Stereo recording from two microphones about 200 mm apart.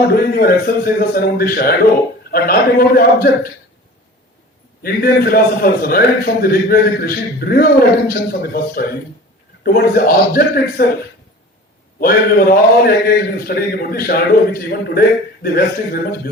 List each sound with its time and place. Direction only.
0.1 s a man's voice: 50° left (ahead or behind)
4.8 s a man's voice: 50° left (ahead or behind)
11.9 s a man's voice: 45° left (ahead or behind)